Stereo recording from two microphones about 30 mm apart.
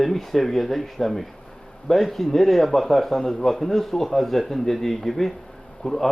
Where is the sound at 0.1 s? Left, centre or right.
Centre.